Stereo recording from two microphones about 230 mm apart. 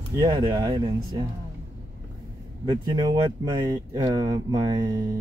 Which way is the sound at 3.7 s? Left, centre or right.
Centre.